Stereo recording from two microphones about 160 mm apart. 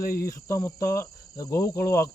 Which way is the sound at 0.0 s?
70° left (ahead or behind).